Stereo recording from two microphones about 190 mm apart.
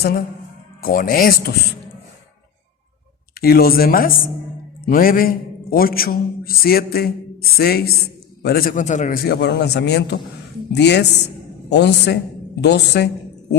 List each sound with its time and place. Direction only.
0.8 s a man's voice: 50° left (ahead or behind)
3.3 s a man's voice: 55° left (ahead or behind)